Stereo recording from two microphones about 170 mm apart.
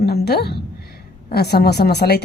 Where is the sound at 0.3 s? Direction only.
70° left (ahead or behind).